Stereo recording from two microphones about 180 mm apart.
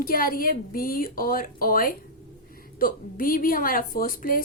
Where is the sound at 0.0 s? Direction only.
55° left (ahead or behind).